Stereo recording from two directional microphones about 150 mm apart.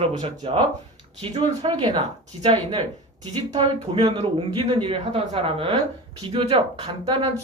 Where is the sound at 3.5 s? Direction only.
35° right (ahead or behind).